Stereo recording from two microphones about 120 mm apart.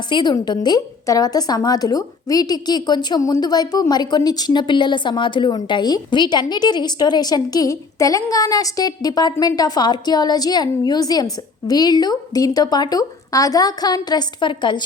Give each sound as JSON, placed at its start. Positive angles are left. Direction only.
{"t": 0.1, "sound": "a woman's voice", "side_deg": 40}